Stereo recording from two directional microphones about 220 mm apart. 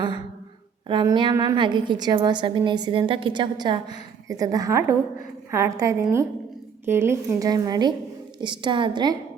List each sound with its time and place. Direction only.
0.9 s a woman's voice: 20° right (ahead or behind)